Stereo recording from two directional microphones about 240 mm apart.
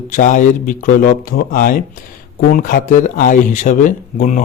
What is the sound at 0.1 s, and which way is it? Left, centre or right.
Speech, left.